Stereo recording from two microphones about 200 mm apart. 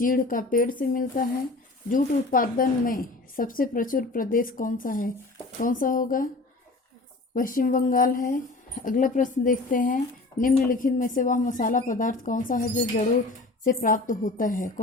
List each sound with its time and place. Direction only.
0.0 s a woman's voice: 45° left (ahead or behind)
7.3 s speech: 40° left (ahead or behind)